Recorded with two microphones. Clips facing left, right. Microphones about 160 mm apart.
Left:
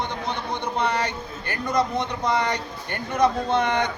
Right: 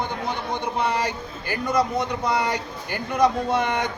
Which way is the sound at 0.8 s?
5° right (ahead or behind).